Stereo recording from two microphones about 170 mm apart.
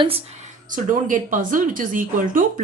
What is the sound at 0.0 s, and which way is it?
Speech, 40° right (ahead or behind).